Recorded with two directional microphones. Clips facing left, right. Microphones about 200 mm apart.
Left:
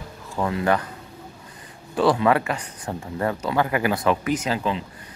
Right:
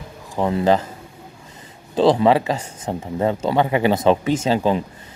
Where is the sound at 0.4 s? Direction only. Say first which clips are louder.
Right 5 dB; 25° right (ahead or behind).